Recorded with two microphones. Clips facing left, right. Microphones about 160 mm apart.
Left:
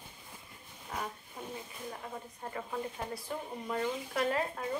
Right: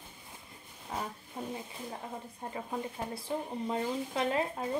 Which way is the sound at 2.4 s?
25° right (ahead or behind).